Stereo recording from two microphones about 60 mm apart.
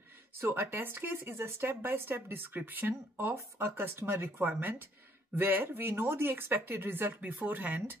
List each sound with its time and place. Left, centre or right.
0.4 s speech: right
7.2 s speech: right